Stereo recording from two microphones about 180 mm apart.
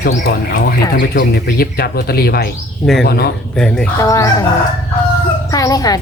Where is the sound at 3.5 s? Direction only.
5° left (ahead or behind).